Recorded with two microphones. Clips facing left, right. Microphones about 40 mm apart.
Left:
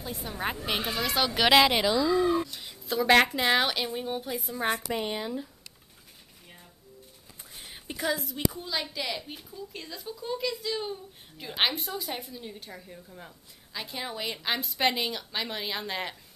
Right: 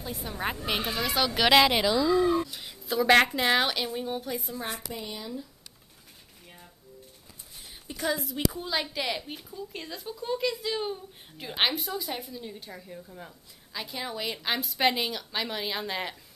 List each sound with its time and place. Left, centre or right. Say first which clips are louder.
0.0 s a woman's voice: even; centre
4.6 s speech: left 7 dB; left
5.1 s speech: left 4 dB; left
7.6 s a sound: left 2 dB; left
8.0 s a woman's voice: right 1 dB; centre
8.5 s a woman's voice: right 2 dB; centre